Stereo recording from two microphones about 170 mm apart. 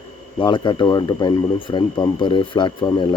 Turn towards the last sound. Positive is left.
turn(degrees=25)  # may be behind; listen again after turning